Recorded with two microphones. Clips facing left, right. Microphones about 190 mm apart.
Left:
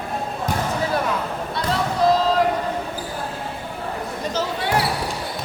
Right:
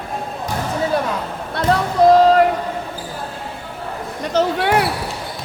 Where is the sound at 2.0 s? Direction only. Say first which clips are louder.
Right 6 dB; 55° right (ahead or behind).